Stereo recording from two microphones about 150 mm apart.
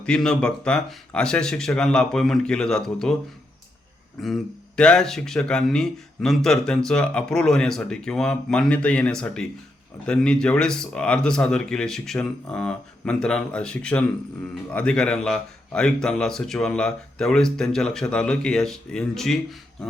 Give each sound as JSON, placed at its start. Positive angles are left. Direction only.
{"t": 0.0, "sound": "speech", "side_deg": 5}
{"t": 4.2, "sound": "speech", "side_deg": 0}